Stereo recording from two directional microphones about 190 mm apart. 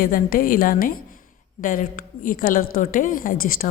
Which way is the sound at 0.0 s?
45° left (ahead or behind).